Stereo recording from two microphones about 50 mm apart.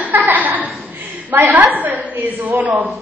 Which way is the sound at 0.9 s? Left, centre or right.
Right.